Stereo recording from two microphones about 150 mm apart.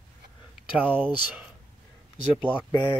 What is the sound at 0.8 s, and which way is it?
Speech, 10° right (ahead or behind).